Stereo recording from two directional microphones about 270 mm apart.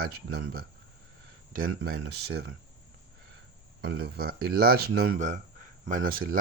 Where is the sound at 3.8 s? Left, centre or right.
Right.